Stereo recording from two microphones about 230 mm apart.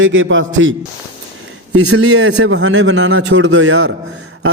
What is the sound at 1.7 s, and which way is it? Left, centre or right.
Mantra, right.